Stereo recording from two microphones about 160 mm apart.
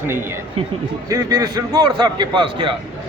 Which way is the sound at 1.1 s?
25° right (ahead or behind).